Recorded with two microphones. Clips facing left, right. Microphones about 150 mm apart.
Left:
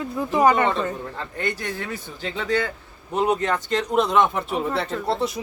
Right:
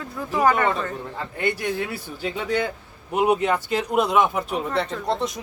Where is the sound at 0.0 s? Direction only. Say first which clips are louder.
Left 2 dB; 20° left (ahead or behind).